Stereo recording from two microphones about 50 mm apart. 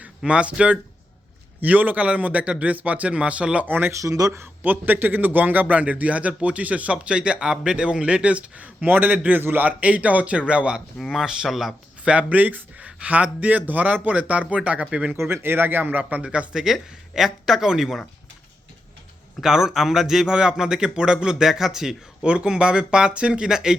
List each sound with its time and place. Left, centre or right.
0.3 s a man's voice: right
1.6 s a man's voice: right
3.7 s a man's voice: right
9.4 s speech: right
9.6 s a man's voice: right
11.1 s speech: centre
12.0 s a man's voice: right
15.2 s speech: right
16.2 s a man's voice: right
16.6 s a man's voice: centre
19.4 s a man's voice: centre
22.3 s a man's voice: right